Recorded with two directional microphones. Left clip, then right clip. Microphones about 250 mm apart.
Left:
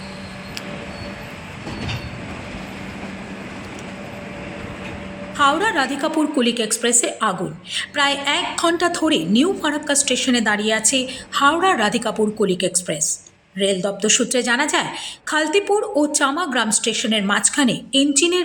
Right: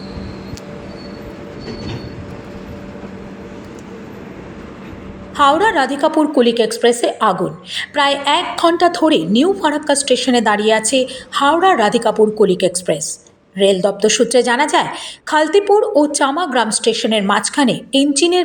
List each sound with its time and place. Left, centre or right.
5.4 s a woman's voice: centre